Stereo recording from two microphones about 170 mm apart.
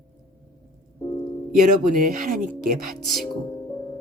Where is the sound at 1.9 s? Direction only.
55° right (ahead or behind).